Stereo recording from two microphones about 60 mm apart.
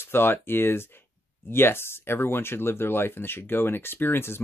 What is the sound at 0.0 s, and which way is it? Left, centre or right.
Speech, left.